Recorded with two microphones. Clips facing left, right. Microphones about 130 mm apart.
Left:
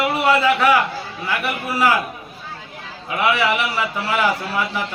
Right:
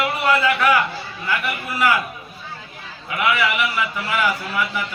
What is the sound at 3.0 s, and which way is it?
A man's voice, 25° left (ahead or behind).